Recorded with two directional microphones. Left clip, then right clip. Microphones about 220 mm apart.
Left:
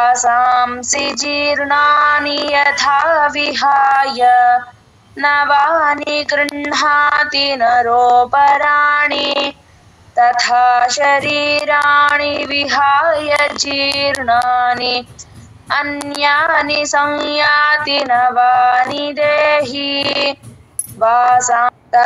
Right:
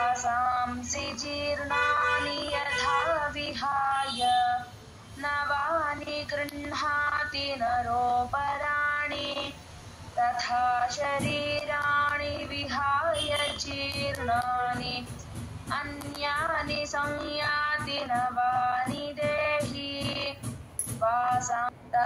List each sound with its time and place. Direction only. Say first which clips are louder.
0.0 s female singing: left 15 dB; 45° left (ahead or behind)